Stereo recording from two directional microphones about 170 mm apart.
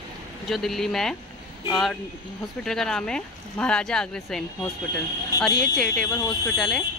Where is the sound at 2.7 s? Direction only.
5° left (ahead or behind).